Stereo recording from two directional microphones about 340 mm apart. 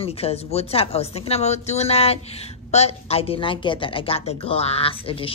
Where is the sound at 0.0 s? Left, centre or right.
Centre.